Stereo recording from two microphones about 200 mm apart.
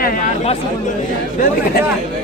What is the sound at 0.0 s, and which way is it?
Speech, 45° left (ahead or behind).